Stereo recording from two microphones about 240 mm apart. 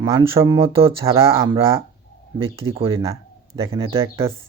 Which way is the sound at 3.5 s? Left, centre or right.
Centre.